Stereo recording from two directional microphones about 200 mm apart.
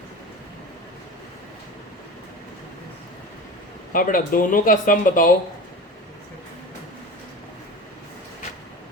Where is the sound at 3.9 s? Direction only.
45° left (ahead or behind).